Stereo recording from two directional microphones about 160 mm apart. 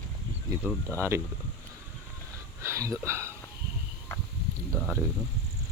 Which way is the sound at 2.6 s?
20° right (ahead or behind).